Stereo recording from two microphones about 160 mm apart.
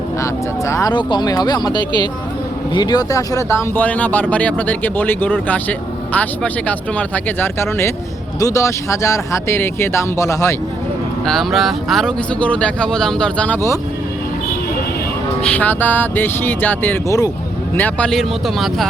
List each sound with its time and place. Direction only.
0.2 s speech: 20° left (ahead or behind)
11.3 s speech: centre (ahead or behind)
15.4 s speech: 10° left (ahead or behind)
17.7 s speech: 10° left (ahead or behind)